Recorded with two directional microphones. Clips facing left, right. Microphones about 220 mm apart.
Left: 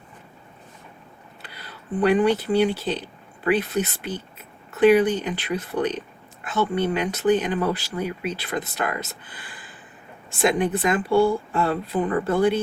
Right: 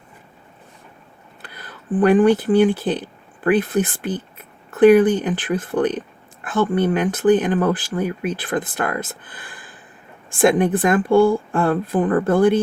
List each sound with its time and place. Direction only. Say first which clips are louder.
1.4 s speech: right 4 dB; 50° right (ahead or behind)